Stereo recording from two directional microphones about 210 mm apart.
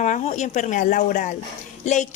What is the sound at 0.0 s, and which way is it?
A woman's voice, 35° left (ahead or behind).